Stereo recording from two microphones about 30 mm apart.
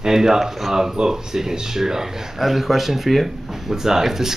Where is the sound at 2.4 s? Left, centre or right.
Centre.